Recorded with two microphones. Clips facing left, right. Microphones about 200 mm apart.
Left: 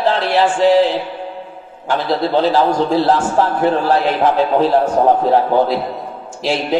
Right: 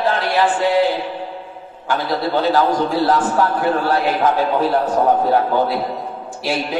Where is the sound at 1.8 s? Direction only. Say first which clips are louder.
Left 3 dB; 30° left (ahead or behind).